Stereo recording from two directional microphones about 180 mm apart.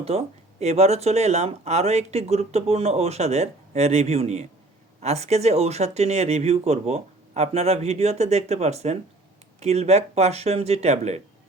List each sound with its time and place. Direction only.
0.0 s speech: 35° right (ahead or behind)